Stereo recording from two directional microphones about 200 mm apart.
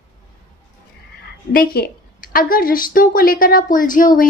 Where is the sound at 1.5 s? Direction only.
50° left (ahead or behind).